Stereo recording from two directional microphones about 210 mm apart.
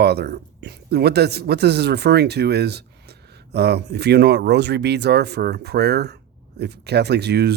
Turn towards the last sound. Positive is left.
turn(degrees=-50)  # may be behind; listen again after turning